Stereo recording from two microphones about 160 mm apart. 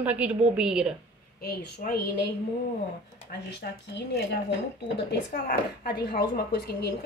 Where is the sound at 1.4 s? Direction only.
70° left (ahead or behind).